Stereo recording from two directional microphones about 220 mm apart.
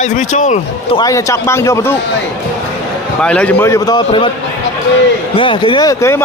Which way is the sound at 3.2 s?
5° left (ahead or behind).